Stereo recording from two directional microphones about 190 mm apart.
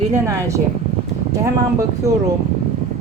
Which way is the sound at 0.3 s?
15° right (ahead or behind).